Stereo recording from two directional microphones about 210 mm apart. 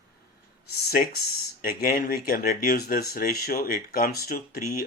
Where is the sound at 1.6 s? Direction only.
45° left (ahead or behind).